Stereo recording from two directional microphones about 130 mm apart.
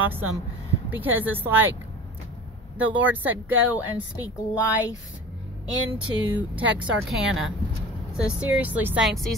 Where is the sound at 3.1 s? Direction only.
15° right (ahead or behind).